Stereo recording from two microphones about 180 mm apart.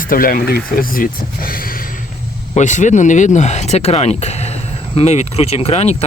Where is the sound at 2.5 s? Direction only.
40° left (ahead or behind).